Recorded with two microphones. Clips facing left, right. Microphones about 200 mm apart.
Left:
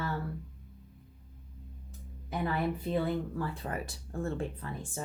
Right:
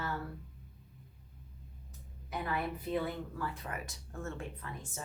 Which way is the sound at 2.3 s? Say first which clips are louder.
Left 5 dB; 30° left (ahead or behind).